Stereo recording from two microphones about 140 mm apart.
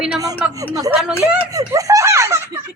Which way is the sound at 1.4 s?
25° right (ahead or behind).